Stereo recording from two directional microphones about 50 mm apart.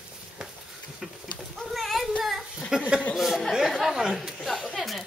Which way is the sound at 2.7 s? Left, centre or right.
Centre.